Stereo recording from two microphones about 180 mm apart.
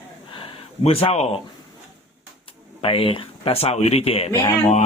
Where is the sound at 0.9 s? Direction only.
35° left (ahead or behind).